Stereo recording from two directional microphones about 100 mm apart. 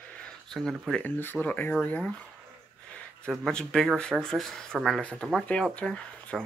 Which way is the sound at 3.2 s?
5° left (ahead or behind).